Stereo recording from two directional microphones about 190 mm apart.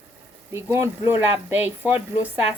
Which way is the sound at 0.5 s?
15° right (ahead or behind).